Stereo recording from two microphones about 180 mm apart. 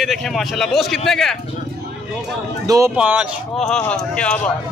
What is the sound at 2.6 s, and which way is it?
Speech, 15° right (ahead or behind).